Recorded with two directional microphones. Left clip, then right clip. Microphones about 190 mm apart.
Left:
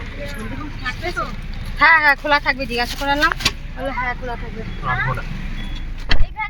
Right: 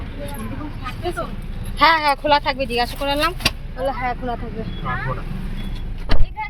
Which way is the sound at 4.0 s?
40° right (ahead or behind).